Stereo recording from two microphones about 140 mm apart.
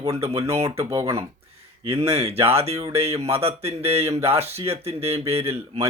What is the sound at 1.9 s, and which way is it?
Speech, 45° right (ahead or behind).